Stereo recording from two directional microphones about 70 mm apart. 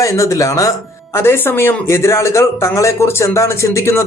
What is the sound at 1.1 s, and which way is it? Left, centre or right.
Speech, left.